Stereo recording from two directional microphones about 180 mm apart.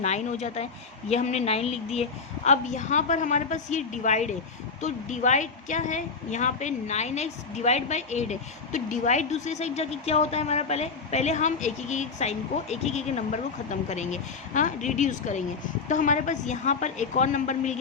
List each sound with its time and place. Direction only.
0.0 s a woman's voice: 40° left (ahead or behind)